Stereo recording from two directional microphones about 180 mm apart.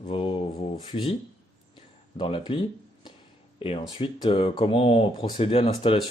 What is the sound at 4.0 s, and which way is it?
Speech, 30° left (ahead or behind).